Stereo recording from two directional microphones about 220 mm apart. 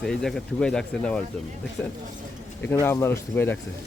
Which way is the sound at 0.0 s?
Centre (ahead or behind).